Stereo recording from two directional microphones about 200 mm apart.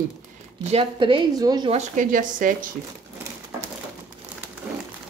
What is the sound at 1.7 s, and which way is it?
Speech, 40° right (ahead or behind).